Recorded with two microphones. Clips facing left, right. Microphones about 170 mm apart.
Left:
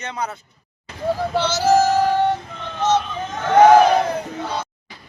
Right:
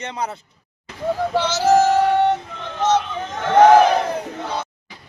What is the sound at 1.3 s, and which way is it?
Child singing, 15° right (ahead or behind).